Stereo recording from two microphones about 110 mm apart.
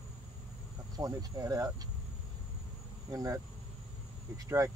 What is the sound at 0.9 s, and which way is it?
Speech, 35° right (ahead or behind).